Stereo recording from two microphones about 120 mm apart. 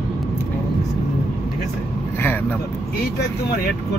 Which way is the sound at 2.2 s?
15° left (ahead or behind).